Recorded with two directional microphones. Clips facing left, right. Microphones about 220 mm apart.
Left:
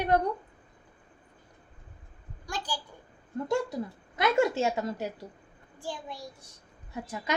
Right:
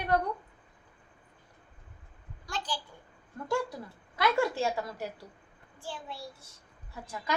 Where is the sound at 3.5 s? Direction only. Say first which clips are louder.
Left 2 dB; 20° left (ahead or behind).